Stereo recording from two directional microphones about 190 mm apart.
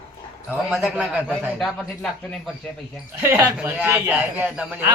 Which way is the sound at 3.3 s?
15° right (ahead or behind).